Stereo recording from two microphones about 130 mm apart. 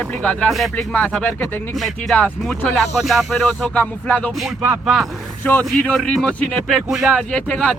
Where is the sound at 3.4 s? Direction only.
10° left (ahead or behind).